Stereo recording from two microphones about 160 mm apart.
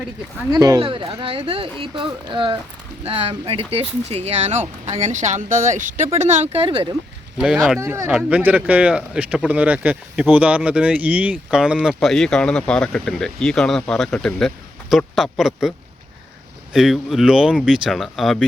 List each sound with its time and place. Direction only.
0.5 s speech: 25° right (ahead or behind)
7.3 s speech: 5° right (ahead or behind)
16.7 s speech: centre (ahead or behind)